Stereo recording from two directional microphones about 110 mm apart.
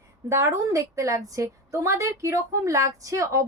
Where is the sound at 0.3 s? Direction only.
25° right (ahead or behind).